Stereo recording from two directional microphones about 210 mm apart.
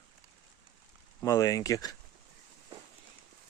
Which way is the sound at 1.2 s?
15° left (ahead or behind).